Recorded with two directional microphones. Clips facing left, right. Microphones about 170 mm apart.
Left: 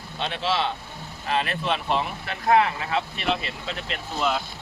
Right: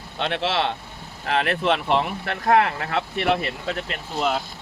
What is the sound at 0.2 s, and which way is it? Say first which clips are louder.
Speech: right 2 dB; 65° right (ahead or behind).